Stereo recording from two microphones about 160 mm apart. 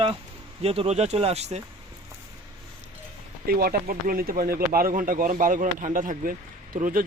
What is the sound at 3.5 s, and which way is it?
Speech, 70° right (ahead or behind).